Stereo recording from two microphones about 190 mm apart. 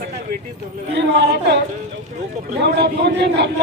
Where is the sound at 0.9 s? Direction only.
60° right (ahead or behind).